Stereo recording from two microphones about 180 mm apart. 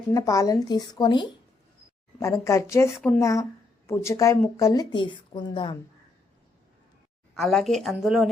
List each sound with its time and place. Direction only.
0.1 s speech: 20° left (ahead or behind)
7.3 s a woman's voice: centre (ahead or behind)